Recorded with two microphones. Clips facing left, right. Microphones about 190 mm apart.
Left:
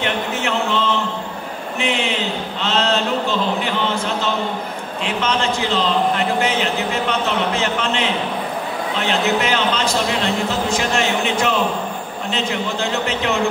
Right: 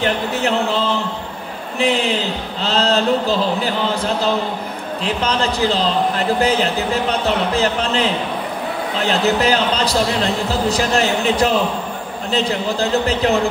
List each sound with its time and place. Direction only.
0.0 s music: 35° right (ahead or behind)
1.8 s a man's voice: 35° right (ahead or behind)